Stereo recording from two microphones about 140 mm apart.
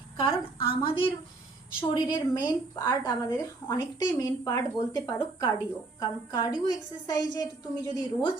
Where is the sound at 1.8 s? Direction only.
30° left (ahead or behind).